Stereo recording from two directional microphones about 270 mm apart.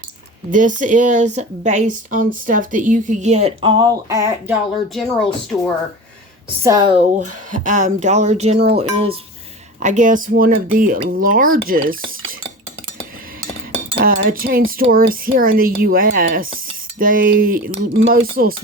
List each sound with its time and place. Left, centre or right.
0.5 s speech: right; by 5.7 s centre
6.6 s speech: centre
7.5 s speech: right
14.0 s cutlery: right
14.7 s speech: right